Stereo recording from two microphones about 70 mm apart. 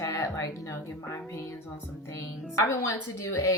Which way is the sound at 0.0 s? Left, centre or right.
Left.